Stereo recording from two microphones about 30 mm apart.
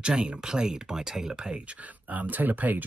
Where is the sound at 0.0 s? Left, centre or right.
Right.